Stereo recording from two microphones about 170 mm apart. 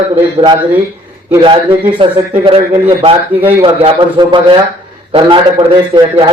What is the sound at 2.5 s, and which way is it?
A man's voice, 30° right (ahead or behind).